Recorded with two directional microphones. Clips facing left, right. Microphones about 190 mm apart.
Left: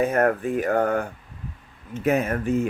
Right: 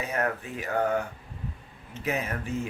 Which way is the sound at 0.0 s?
50° left (ahead or behind).